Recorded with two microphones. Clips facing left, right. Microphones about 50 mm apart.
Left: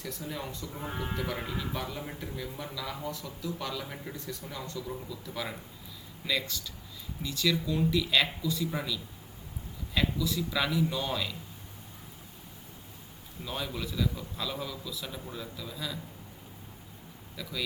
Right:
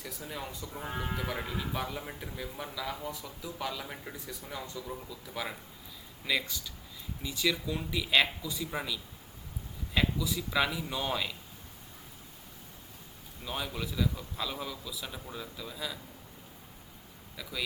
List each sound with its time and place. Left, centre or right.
0.0 s speech: centre
13.4 s speech: centre
17.3 s speech: centre